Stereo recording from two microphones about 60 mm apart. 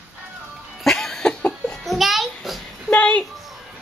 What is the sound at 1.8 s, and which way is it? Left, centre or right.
Music, centre.